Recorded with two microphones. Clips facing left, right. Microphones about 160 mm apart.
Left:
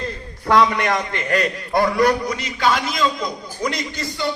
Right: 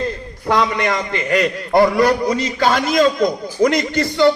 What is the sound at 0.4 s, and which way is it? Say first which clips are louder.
Speech: left 1 dB; 20° right (ahead or behind).